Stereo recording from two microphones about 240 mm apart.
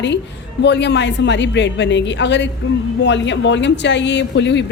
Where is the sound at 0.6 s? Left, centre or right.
Left.